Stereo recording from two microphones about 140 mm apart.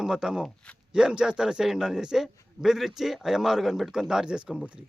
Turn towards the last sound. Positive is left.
turn(degrees=-10)  # may be behind; listen again after turning